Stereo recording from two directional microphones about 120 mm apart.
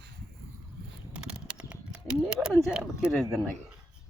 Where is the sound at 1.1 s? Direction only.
5° right (ahead or behind).